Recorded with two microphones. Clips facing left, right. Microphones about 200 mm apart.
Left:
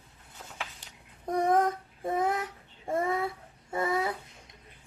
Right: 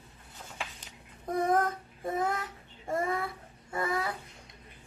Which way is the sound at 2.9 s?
Centre (ahead or behind).